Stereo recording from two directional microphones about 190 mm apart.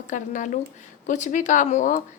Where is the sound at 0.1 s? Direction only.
40° left (ahead or behind).